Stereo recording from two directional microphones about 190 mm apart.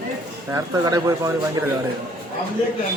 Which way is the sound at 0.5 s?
20° right (ahead or behind).